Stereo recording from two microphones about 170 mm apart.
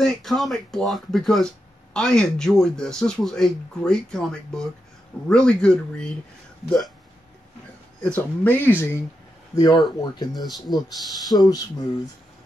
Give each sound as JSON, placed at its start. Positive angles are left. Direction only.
{"t": 0.0, "sound": "speech", "side_deg": 0}
{"t": 8.0, "sound": "speech", "side_deg": 10}
{"t": 9.6, "sound": "speech", "side_deg": 25}
{"t": 10.3, "sound": "speech", "side_deg": 0}
{"t": 11.2, "sound": "speech", "side_deg": 25}